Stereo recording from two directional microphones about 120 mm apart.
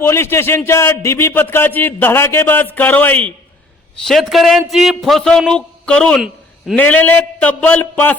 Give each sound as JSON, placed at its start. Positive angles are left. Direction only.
{"t": 0.0, "sound": "a man's voice", "side_deg": 20}
{"t": 4.0, "sound": "a man's voice", "side_deg": 0}